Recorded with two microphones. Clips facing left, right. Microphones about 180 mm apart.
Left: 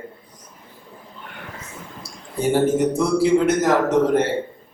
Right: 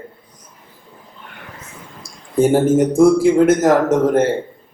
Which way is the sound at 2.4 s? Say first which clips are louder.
Right 5 dB; 45° right (ahead or behind).